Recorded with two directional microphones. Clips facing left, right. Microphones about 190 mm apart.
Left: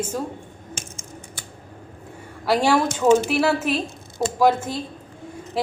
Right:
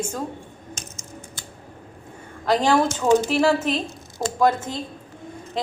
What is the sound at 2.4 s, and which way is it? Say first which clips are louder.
A woman's voice: even; 10° left (ahead or behind).